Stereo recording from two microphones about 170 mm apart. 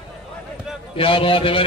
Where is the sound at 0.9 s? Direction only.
30° left (ahead or behind).